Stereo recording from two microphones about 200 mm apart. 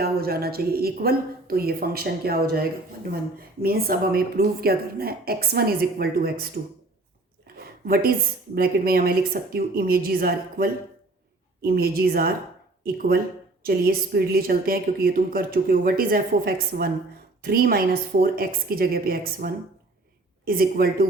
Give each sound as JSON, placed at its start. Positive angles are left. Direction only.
{"t": 0.0, "sound": "a woman's voice", "side_deg": -50}
{"t": 7.4, "sound": "a sound", "side_deg": -50}
{"t": 8.5, "sound": "a woman's voice", "side_deg": -50}